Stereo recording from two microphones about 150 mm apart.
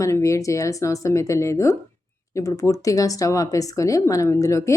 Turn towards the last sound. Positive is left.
turn(degrees=20)  # may be behind; listen again after turning